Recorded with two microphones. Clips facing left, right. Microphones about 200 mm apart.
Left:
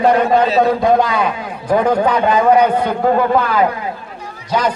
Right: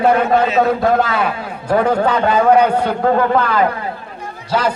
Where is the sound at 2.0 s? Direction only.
10° left (ahead or behind).